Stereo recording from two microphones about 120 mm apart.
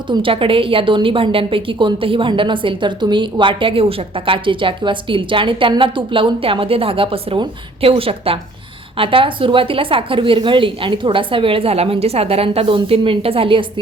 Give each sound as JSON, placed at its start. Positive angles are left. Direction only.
{"t": 0.1, "sound": "a woman's voice", "side_deg": -45}